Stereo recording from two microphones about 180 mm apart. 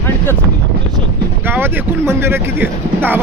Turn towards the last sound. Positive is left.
turn(degrees=-10)  # may be behind; listen again after turning